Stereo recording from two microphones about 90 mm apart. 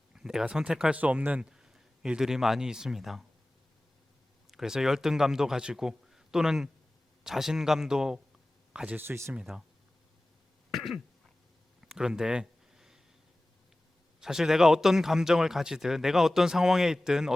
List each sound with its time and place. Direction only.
0.1 s a man's voice: 5° right (ahead or behind)
4.5 s a man's voice: 5° right (ahead or behind)
9.0 s speech: 25° right (ahead or behind)
9.3 s speech: 10° right (ahead or behind)
10.7 s throat clearing: centre (ahead or behind)
11.8 s a sound: 5° right (ahead or behind)
14.2 s a man's voice: 5° right (ahead or behind)